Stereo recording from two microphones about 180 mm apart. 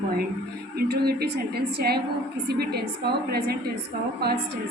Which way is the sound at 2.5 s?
60° right (ahead or behind).